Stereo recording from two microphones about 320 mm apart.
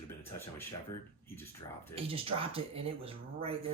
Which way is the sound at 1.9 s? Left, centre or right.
Centre.